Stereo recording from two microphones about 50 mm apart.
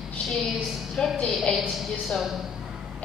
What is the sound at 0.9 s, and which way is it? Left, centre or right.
Speech, centre.